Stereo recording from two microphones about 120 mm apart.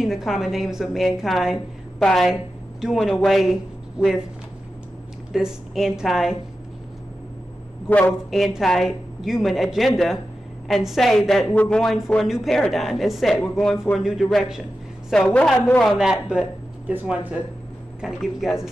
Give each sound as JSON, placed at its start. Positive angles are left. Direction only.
{"t": 0.0, "sound": "a woman's voice", "side_deg": 0}
{"t": 5.3, "sound": "a woman's voice", "side_deg": -5}
{"t": 7.9, "sound": "speech", "side_deg": 15}
{"t": 8.3, "sound": "a woman's voice", "side_deg": 0}